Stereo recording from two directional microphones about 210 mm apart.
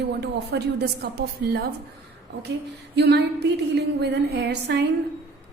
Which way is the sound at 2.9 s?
50° right (ahead or behind).